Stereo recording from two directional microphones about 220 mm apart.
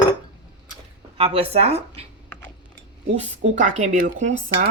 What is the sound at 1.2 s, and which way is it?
Speech, 25° right (ahead or behind).